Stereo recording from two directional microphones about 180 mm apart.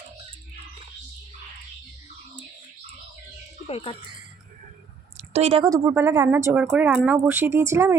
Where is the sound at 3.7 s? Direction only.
30° left (ahead or behind).